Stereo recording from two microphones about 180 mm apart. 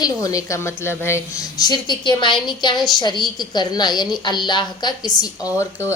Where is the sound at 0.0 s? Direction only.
20° left (ahead or behind).